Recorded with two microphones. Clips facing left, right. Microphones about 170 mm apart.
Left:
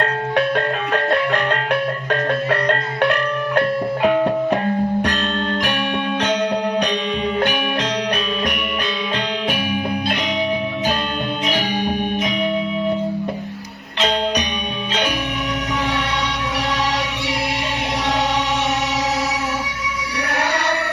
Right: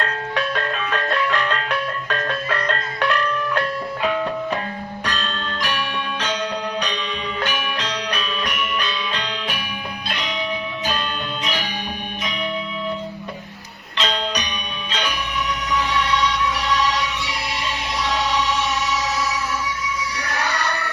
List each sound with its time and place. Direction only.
0.0 s music: 55° left (ahead or behind)
7.4 s music: 55° left (ahead or behind)
14.0 s music: 55° left (ahead or behind)
16.0 s music: 60° left (ahead or behind)
20.2 s music: 65° left (ahead or behind)